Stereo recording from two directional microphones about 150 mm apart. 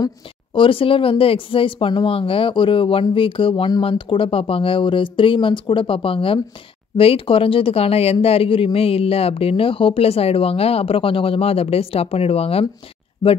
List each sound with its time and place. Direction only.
0.6 s speech: 35° left (ahead or behind)